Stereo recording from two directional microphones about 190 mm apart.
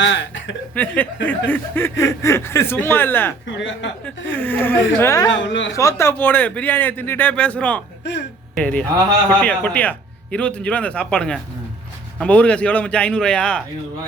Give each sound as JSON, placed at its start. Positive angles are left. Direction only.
{"t": 0.0, "sound": "speech", "side_deg": 75}
{"t": 0.8, "sound": "snicker", "side_deg": 5}
{"t": 3.4, "sound": "speech", "side_deg": 75}
{"t": 4.3, "sound": "snicker", "side_deg": 10}
{"t": 5.5, "sound": "speech", "side_deg": 75}
{"t": 5.7, "sound": "snicker", "side_deg": 15}
{"t": 10.3, "sound": "a man's voice", "side_deg": 5}